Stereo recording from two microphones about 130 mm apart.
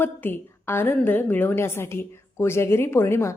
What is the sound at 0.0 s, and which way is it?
A woman's voice, 15° left (ahead or behind).